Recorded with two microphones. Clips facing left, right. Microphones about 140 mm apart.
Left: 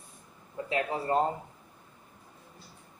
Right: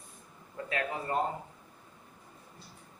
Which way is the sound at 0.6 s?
20° left (ahead or behind).